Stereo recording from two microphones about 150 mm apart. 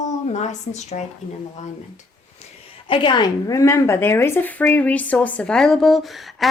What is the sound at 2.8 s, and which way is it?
A woman's voice, 35° left (ahead or behind).